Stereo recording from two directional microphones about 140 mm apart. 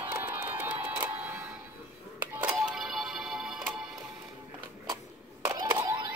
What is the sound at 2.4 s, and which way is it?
Music, 10° right (ahead or behind).